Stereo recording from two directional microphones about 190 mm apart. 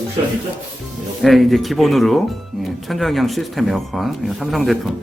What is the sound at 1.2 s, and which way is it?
Speech, centre (ahead or behind).